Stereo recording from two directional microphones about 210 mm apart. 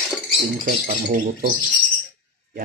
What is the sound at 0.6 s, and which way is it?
Speech, 40° right (ahead or behind).